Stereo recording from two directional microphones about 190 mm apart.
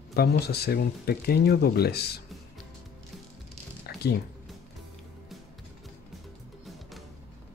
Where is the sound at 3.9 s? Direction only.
55° left (ahead or behind).